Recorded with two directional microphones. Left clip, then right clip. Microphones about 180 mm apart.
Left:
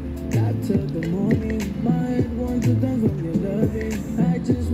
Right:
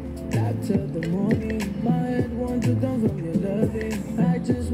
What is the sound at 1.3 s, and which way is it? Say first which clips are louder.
Music: left 2 dB; 20° left (ahead or behind).